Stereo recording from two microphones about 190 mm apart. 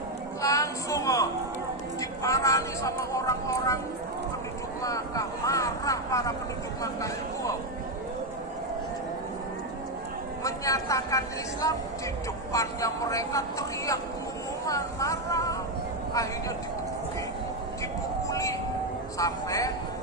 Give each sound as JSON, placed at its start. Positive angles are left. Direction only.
{"t": 0.4, "sound": "a sound", "side_deg": 15}
{"t": 2.0, "sound": "a woman's voice", "side_deg": 15}
{"t": 4.8, "sound": "a woman's voice", "side_deg": 20}
{"t": 10.4, "sound": "a woman's voice", "side_deg": 15}
{"t": 12.5, "sound": "a woman's voice", "side_deg": 15}
{"t": 18.3, "sound": "music", "side_deg": 15}
{"t": 19.2, "sound": "a woman's voice", "side_deg": 20}